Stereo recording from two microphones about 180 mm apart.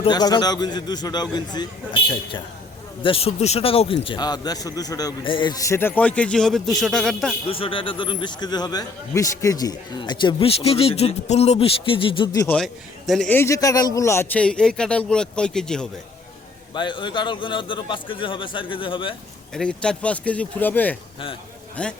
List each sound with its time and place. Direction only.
0.0 s a man's voice: 25° left (ahead or behind)
3.0 s a man's voice: 30° left (ahead or behind); by 7.3 s centre (ahead or behind)
7.4 s a man's voice: 30° left (ahead or behind)
12.5 s a man's voice: centre (ahead or behind)
16.7 s a man's voice: 25° left (ahead or behind)
19.5 s a man's voice: 5° left (ahead or behind)